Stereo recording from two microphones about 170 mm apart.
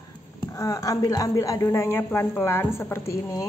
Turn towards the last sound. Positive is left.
turn(degrees=15)  # may be behind; listen again after turning